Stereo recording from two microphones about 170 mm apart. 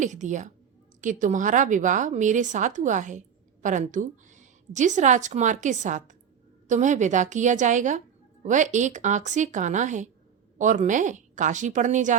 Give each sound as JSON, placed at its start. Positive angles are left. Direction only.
{"t": 0.0, "sound": "a woman's voice", "side_deg": -45}